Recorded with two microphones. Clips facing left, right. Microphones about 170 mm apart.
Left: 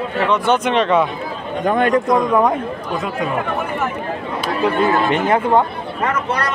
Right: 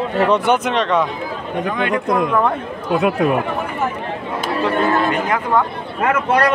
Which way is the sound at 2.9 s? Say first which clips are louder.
Right 8 dB; 65° right (ahead or behind).